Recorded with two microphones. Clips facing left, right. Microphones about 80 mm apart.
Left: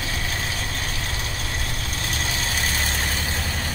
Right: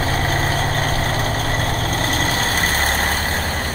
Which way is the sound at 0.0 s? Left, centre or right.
Right.